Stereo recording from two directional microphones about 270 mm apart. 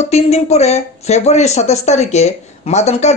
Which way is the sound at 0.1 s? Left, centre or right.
Left.